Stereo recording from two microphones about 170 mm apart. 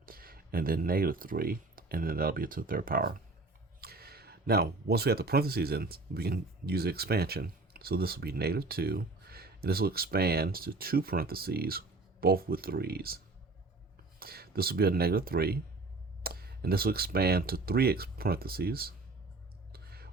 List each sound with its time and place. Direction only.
0.0 s speech: 60° right (ahead or behind)
14.2 s speech: 65° right (ahead or behind)
19.7 s a sound: 65° right (ahead or behind)